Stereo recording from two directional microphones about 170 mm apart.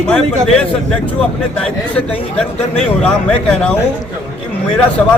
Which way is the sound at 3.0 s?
10° left (ahead or behind).